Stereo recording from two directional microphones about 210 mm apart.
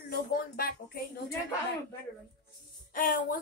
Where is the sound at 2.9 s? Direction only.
40° left (ahead or behind).